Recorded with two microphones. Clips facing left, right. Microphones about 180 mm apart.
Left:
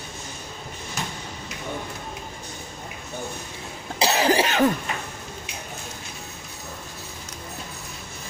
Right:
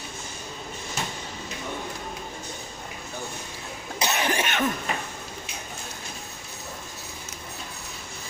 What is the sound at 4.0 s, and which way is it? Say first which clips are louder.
Cough: left 6 dB; 35° left (ahead or behind).